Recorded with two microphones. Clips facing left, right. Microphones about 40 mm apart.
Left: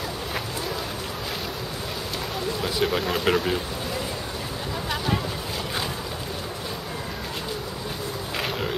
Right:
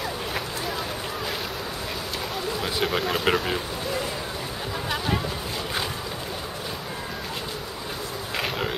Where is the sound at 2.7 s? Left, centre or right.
Centre.